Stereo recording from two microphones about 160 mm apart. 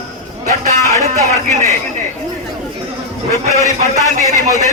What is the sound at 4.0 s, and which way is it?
Speech, 20° right (ahead or behind).